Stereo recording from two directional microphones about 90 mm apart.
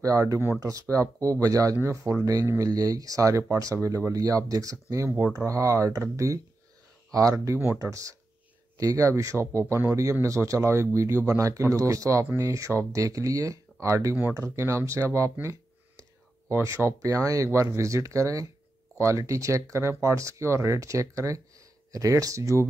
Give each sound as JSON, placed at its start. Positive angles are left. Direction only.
{"t": 0.0, "sound": "speech", "side_deg": -40}
{"t": 16.4, "sound": "speech", "side_deg": -30}